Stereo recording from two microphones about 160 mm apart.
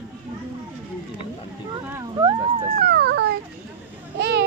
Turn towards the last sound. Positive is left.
turn(degrees=-90)